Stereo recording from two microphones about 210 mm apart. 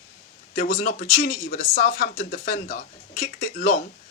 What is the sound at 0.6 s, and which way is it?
Speech, 40° left (ahead or behind).